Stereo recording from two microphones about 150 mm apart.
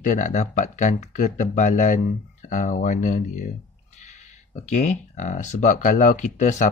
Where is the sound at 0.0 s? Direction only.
60° left (ahead or behind).